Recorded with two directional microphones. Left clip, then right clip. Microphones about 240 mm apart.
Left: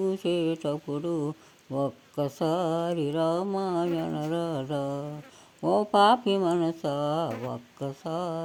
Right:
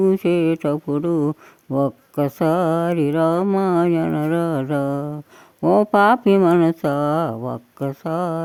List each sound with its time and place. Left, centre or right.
0.0 s speech: right